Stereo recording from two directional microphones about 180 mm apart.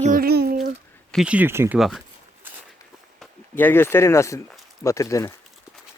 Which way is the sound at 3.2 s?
10° left (ahead or behind).